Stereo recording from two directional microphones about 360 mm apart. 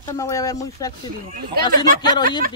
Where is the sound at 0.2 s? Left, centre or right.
Centre.